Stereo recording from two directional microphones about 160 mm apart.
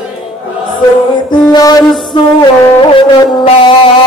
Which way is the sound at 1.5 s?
25° left (ahead or behind).